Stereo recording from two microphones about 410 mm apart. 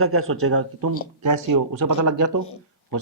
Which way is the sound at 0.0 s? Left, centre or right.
Right.